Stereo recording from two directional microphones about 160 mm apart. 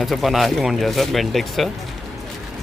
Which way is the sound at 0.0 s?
Centre (ahead or behind).